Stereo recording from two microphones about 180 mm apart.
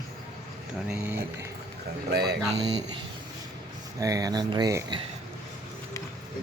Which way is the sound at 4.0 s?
20° right (ahead or behind).